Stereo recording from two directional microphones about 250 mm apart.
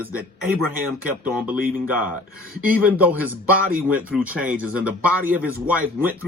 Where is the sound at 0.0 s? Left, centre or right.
Centre.